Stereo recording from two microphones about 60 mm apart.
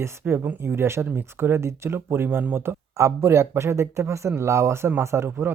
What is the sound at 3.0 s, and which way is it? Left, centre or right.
Speech, right.